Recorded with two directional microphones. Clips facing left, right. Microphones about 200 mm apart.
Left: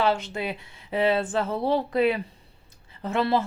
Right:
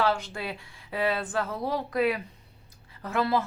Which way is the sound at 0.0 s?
20° left (ahead or behind).